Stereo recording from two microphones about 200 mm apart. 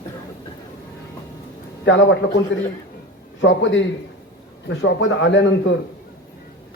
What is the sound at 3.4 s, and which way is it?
A man's voice, 65° left (ahead or behind).